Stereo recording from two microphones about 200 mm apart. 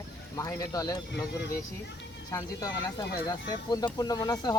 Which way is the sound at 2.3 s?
20° left (ahead or behind).